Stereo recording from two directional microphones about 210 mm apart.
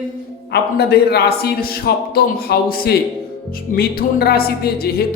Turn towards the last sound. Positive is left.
turn(degrees=45)  # may be behind; listen again after turning